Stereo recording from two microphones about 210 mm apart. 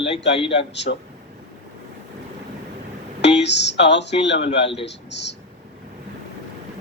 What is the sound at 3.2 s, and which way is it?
Speech, 55° left (ahead or behind).